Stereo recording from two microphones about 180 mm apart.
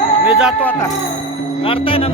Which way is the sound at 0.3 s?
5° right (ahead or behind).